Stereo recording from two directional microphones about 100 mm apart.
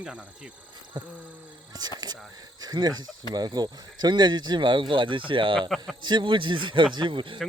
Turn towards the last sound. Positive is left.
turn(degrees=-55)  # may be behind; listen again after turning